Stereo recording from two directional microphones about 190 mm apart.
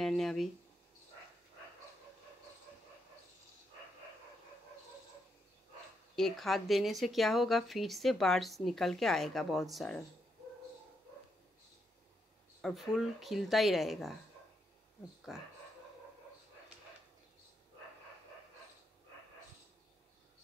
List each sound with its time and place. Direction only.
0.0 s a sound: centre (ahead or behind)
6.1 s speech: centre (ahead or behind)
12.6 s speech: centre (ahead or behind)
15.3 s speech: centre (ahead or behind)